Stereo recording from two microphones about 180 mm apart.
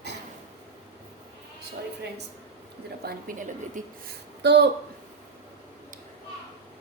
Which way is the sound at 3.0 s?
55° right (ahead or behind).